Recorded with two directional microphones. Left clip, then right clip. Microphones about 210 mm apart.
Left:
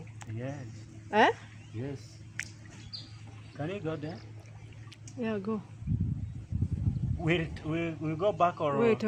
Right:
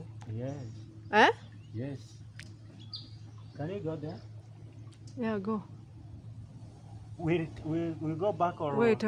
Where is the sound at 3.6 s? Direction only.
Centre (ahead or behind).